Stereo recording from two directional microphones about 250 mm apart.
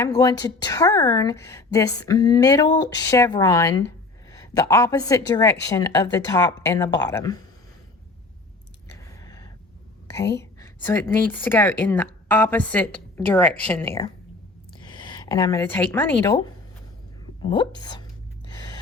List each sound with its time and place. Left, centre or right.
0.0 s a woman's voice: centre
10.3 s a woman's voice: centre
17.4 s a woman's voice: centre
18.5 s gasp: centre